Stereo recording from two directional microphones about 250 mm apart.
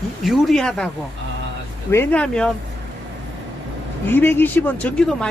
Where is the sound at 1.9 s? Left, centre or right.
Centre.